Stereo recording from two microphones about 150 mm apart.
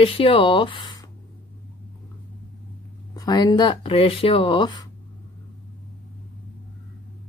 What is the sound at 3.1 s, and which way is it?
Speech, 25° left (ahead or behind).